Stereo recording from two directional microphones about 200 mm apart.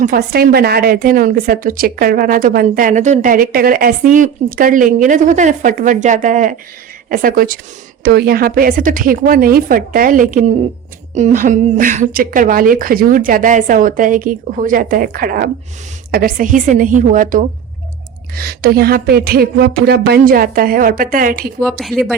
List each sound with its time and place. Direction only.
0.0 s a woman's voice: 45° right (ahead or behind)
21.6 s speech: centre (ahead or behind)